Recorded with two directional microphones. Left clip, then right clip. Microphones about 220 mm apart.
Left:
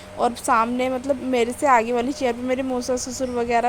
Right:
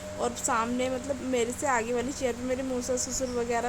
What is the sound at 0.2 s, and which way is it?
Speech, 20° left (ahead or behind).